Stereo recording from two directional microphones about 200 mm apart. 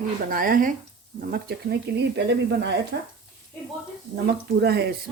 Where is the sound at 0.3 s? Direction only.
45° right (ahead or behind).